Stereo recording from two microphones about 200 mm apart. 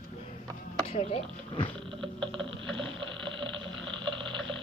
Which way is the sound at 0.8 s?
30° left (ahead or behind).